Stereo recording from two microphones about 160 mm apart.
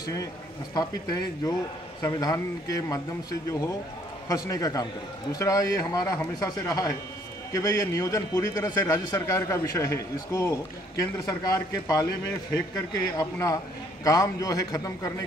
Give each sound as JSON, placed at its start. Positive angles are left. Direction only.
{"t": 0.0, "sound": "a man's voice", "side_deg": 20}